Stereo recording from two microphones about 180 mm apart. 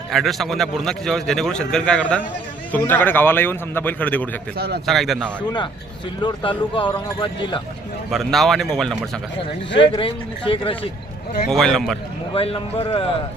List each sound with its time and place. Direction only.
0.1 s a man's voice: centre (ahead or behind)
4.5 s speech: 60° right (ahead or behind)
4.9 s a man's voice: centre (ahead or behind)
6.2 s speech: 25° left (ahead or behind)
8.1 s a man's voice: centre (ahead or behind)
9.8 s speech: 30° left (ahead or behind)
11.5 s a man's voice: centre (ahead or behind)
12.3 s a man's voice: 30° left (ahead or behind)